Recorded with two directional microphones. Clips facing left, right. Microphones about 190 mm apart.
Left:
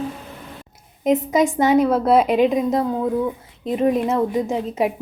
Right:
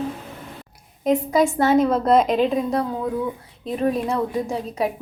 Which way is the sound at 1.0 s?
20° left (ahead or behind).